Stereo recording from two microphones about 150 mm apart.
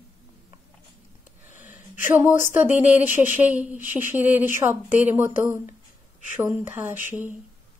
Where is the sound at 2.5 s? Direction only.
10° right (ahead or behind).